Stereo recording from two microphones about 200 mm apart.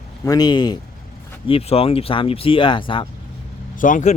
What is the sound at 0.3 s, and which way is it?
Speech, 20° left (ahead or behind).